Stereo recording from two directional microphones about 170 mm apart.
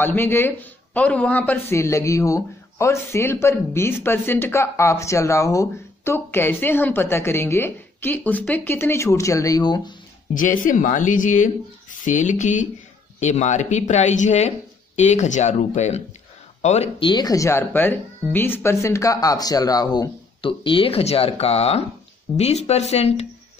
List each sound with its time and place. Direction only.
0.0 s a man's voice: 15° left (ahead or behind)
10.3 s speech: 50° left (ahead or behind)
17.1 s speech: 20° left (ahead or behind); by 23.2 s 40° left (ahead or behind)